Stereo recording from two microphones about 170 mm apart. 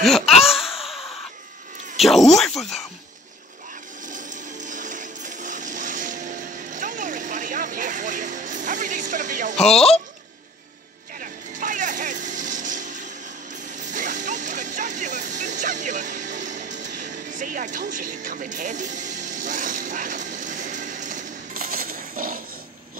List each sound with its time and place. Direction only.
0.0 s laughter: centre (ahead or behind)
0.8 s a sound: centre (ahead or behind)
2.0 s speech: centre (ahead or behind)
4.0 s music: 50° right (ahead or behind)
9.7 s speech: 35° left (ahead or behind)
11.1 s vehicle: 50° right (ahead or behind)
13.9 s music: 50° right (ahead or behind)